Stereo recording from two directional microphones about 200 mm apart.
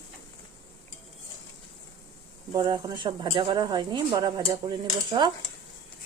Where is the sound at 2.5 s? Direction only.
20° right (ahead or behind).